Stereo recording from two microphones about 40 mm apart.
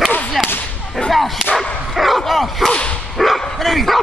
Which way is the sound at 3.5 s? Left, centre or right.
Centre.